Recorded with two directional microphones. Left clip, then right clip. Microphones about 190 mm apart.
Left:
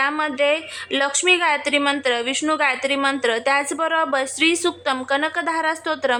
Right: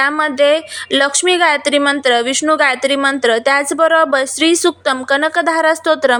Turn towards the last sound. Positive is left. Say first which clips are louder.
# right 9 dB
turn(degrees=-25)  # may be behind; listen again after turning